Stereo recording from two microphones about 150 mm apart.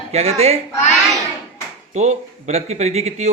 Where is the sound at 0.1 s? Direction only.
45° right (ahead or behind).